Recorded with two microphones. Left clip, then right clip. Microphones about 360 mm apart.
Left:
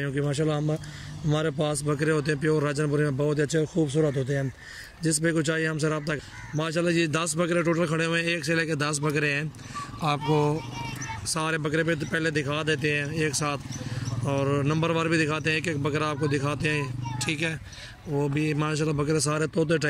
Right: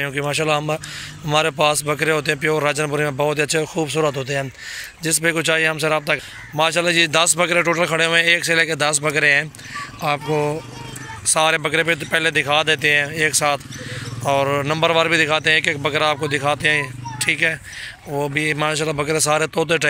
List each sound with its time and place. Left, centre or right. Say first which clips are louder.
0.1 s a man's voice: right 7 dB; centre
4.0 s speech: right 8 dB; right
5.0 s a man's voice: right 7 dB; centre